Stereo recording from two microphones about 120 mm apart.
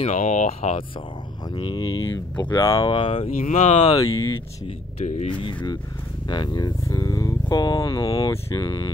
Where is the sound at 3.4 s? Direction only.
80° left.